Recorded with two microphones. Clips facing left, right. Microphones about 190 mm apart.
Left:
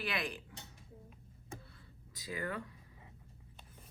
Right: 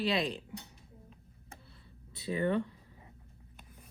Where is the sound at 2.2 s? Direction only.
30° right (ahead or behind).